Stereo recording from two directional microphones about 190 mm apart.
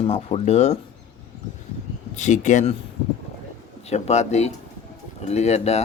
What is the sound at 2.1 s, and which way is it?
Speech, 40° left (ahead or behind).